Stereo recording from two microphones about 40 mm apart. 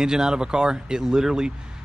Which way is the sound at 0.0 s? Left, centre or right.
Centre.